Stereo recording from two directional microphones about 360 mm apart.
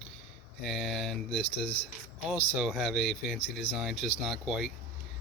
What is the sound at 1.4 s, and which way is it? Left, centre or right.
Speech, centre.